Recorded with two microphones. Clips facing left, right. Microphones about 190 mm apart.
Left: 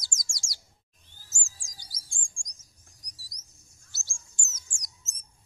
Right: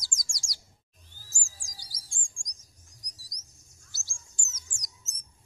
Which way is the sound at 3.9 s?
25° left (ahead or behind).